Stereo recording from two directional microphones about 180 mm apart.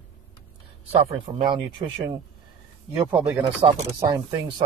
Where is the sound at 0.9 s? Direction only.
35° right (ahead or behind).